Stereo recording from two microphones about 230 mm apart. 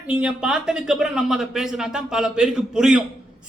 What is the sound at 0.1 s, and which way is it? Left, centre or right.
Speech, centre.